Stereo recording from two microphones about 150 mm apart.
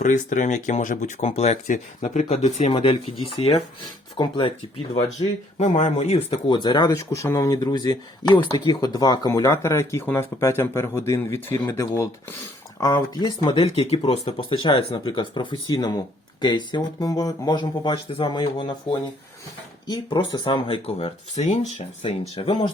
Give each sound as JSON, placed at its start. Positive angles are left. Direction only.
{"t": 0.0, "sound": "speech", "side_deg": 55}
{"t": 5.5, "sound": "speech", "side_deg": 50}
{"t": 6.5, "sound": "speech", "side_deg": 30}
{"t": 19.9, "sound": "speech", "side_deg": 30}